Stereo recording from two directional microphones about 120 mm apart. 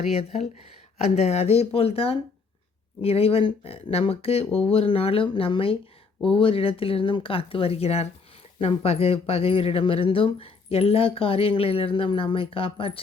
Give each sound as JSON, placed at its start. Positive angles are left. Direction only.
{"t": 0.0, "sound": "speech", "side_deg": 60}